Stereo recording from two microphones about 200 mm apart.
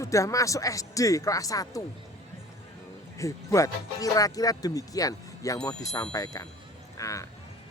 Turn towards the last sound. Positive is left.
turn(degrees=15)  # may be behind; listen again after turning